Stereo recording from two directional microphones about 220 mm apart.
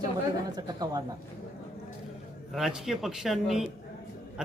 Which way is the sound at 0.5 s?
20° right (ahead or behind).